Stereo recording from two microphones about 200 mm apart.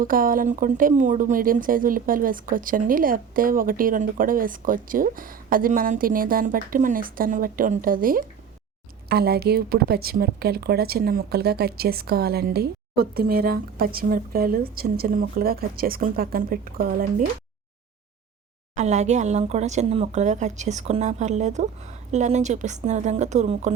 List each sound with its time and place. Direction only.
0.0 s speech: 45° right (ahead or behind)
18.8 s speech: 35° right (ahead or behind)